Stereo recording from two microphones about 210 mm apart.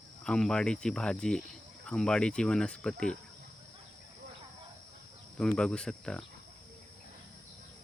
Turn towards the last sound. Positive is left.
turn(degrees=5)  # may be behind; listen again after turning